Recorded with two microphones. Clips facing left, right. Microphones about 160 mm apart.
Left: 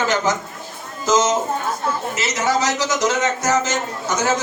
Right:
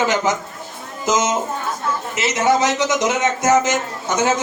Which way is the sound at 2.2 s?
20° right (ahead or behind).